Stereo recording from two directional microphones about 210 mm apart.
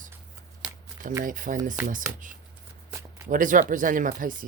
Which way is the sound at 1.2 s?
40° right (ahead or behind).